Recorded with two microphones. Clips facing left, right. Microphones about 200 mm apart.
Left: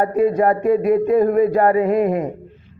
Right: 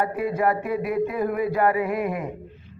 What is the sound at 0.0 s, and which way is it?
Speech, 40° left (ahead or behind).